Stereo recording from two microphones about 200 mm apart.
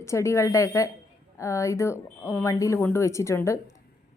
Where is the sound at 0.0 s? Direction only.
15° left (ahead or behind).